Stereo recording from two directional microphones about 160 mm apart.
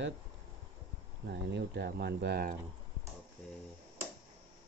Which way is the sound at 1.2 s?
90° right.